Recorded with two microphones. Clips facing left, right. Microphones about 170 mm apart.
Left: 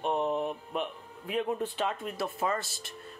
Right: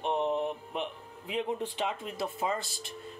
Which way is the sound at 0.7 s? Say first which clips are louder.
Left 2 dB; 20° right (ahead or behind).